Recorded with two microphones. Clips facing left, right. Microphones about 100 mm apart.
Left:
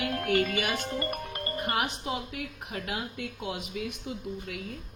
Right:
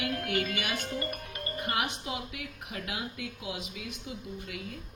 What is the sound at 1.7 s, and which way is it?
A woman's voice, 35° left (ahead or behind).